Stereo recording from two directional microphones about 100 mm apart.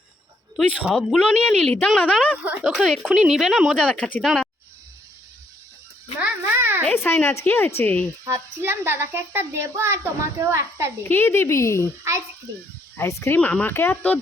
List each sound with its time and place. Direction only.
0.5 s speech: centre (ahead or behind)
2.4 s speech: 15° right (ahead or behind)
2.6 s speech: centre (ahead or behind)
3.8 s speech: 10° left (ahead or behind)
4.2 s speech: centre (ahead or behind)
6.2 s a sound: 20° right (ahead or behind)
6.9 s speech: 20° left (ahead or behind)
8.3 s speech: 25° right (ahead or behind)
11.1 s speech: 25° left (ahead or behind)
13.0 s speech: 30° left (ahead or behind)
13.4 s speech: 15° left (ahead or behind)